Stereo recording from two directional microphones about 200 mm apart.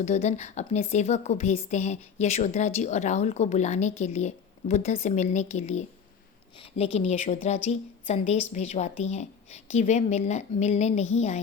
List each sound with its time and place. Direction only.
0.0 s a woman's voice: 35° left (ahead or behind)